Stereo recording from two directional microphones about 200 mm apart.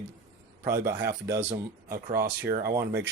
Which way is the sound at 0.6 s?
15° right (ahead or behind).